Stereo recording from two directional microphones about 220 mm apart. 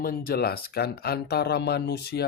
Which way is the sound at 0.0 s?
40° left (ahead or behind).